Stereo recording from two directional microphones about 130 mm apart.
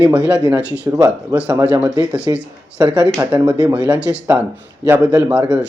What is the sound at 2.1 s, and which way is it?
Speech, 10° right (ahead or behind).